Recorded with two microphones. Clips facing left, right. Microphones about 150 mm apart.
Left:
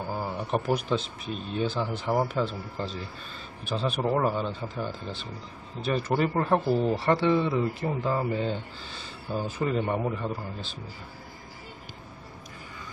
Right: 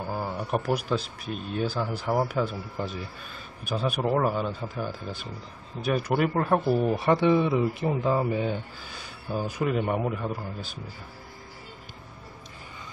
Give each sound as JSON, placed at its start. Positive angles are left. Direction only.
{"t": 0.1, "sound": "a sound", "side_deg": -5}
{"t": 0.7, "sound": "speech", "side_deg": -5}
{"t": 6.6, "sound": "speech", "side_deg": -10}